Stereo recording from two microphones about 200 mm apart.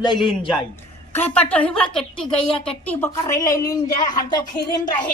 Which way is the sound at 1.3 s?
5° left (ahead or behind).